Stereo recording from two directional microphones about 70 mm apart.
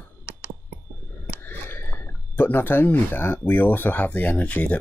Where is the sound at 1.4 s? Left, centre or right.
Left.